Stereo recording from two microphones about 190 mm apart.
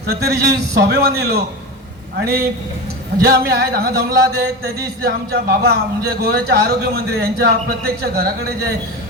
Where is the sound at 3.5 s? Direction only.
55° right (ahead or behind).